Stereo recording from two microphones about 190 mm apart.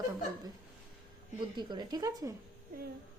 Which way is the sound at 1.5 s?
20° right (ahead or behind).